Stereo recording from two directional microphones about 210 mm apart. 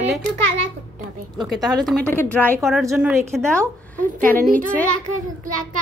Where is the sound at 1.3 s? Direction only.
20° right (ahead or behind).